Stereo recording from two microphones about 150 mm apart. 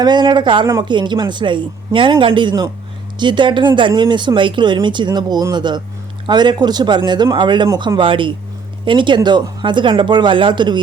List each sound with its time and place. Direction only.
0.0 s speech: 30° right (ahead or behind)